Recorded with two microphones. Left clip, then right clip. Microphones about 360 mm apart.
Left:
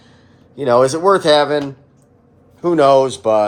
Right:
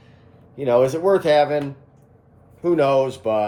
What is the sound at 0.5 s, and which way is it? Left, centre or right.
Speech, left.